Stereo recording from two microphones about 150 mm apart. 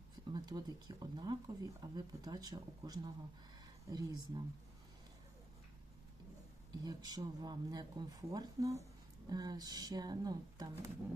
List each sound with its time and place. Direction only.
0.3 s speech: 30° right (ahead or behind)
6.7 s speech: 25° right (ahead or behind)